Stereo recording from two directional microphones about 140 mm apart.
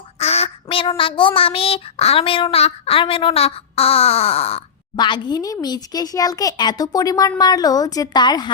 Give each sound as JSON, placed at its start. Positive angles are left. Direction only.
{"t": 0.2, "sound": "quack", "side_deg": 45}
{"t": 4.9, "sound": "speech", "side_deg": 35}